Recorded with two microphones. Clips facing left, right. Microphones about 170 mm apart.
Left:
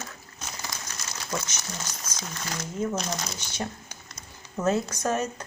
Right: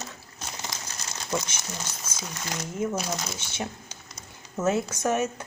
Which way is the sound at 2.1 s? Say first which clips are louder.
Right 1 dB; 10° right (ahead or behind).